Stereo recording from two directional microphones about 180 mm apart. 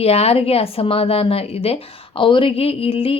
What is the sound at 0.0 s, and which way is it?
A woman's voice, 35° left (ahead or behind).